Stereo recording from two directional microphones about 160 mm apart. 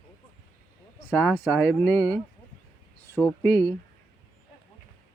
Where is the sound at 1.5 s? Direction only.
5° left (ahead or behind).